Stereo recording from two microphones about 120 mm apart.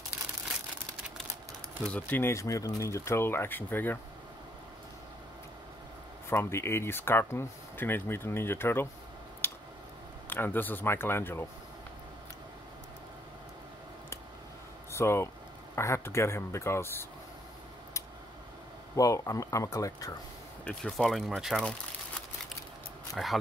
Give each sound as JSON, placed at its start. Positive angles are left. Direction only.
{"t": 1.9, "sound": "speech", "side_deg": 15}
{"t": 6.3, "sound": "speech", "side_deg": 20}
{"t": 9.4, "sound": "a sound", "side_deg": 20}
{"t": 10.3, "sound": "speech", "side_deg": 15}
{"t": 14.9, "sound": "speech", "side_deg": 20}
{"t": 18.9, "sound": "speech", "side_deg": 30}
{"t": 20.6, "sound": "speech", "side_deg": 5}
{"t": 23.1, "sound": "speech", "side_deg": 0}